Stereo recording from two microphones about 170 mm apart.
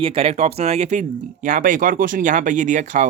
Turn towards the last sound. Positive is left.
turn(degrees=-45)  # may be behind; listen again after turning